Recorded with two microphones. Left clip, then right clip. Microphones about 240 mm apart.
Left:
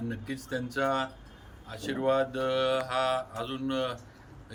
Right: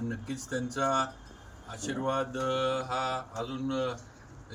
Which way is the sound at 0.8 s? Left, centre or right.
Centre.